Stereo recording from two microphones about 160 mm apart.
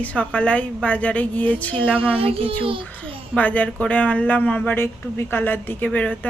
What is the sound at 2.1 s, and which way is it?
A child's voice, 35° right (ahead or behind).